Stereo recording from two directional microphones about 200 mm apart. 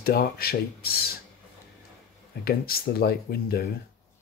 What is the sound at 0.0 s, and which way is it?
Speech, 50° left (ahead or behind).